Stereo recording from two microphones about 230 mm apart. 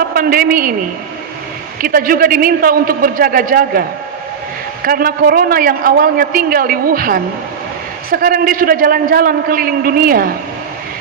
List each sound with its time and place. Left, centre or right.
0.1 s a woman's voice: right
1.8 s a man's voice: right